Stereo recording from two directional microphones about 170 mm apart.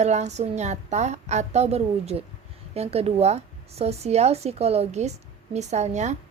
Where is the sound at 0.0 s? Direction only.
40° right (ahead or behind).